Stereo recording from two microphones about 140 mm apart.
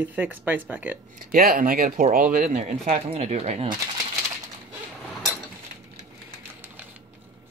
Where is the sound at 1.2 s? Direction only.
85° right; by 3.7 s 50° right (ahead or behind).